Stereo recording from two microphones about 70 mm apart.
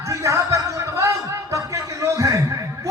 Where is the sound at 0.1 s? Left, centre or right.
Right.